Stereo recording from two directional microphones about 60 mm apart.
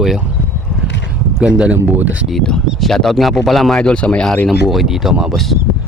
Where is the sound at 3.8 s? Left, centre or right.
Centre.